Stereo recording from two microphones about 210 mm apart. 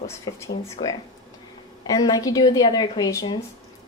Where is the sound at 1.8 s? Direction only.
20° left (ahead or behind).